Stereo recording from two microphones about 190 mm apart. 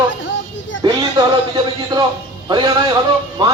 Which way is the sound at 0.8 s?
25° right (ahead or behind).